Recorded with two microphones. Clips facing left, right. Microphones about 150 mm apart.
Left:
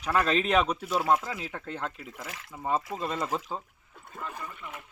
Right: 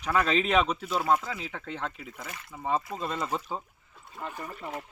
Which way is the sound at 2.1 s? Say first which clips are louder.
Even; 90° left.